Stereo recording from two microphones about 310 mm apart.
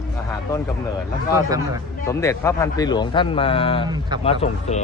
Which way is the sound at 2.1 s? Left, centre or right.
Centre.